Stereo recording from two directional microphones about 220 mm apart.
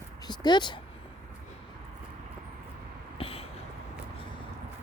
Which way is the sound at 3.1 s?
25° left (ahead or behind).